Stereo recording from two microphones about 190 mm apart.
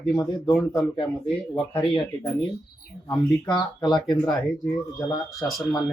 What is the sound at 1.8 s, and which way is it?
Speech, 30° left (ahead or behind).